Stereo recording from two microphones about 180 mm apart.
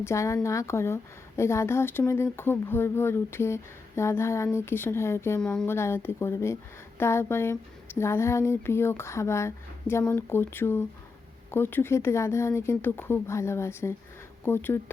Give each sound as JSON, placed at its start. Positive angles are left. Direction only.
{"t": 0.0, "sound": "speech", "side_deg": 15}